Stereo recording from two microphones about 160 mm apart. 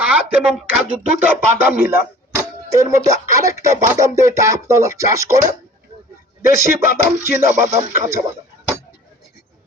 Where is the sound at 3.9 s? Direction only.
20° right (ahead or behind).